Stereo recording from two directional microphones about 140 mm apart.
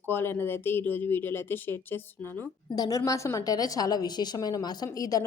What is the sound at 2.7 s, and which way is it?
A woman's voice, 25° left (ahead or behind).